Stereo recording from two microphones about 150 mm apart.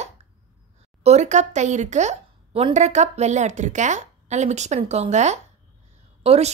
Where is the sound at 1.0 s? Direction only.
50° right (ahead or behind).